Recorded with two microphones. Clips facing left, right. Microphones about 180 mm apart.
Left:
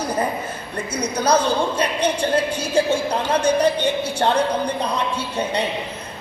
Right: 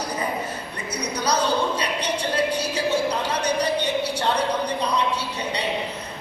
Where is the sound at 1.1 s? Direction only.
50° left (ahead or behind).